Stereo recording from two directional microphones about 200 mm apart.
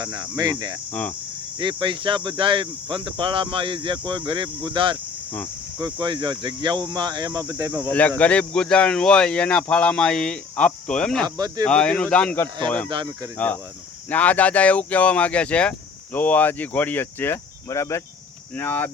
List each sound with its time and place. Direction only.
0.0 s speech: 20° right (ahead or behind)
7.9 s speech: 10° left (ahead or behind)
11.3 s speech: 20° right (ahead or behind)
11.6 s speech: 5° left (ahead or behind)